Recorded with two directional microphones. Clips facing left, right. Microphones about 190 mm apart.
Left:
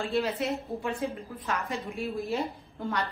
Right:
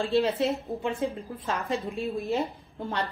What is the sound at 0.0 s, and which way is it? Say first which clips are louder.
A woman's voice: right 4 dB; 30° right (ahead or behind).